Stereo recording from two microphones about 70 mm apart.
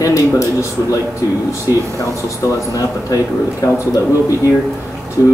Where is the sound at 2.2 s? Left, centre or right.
Left.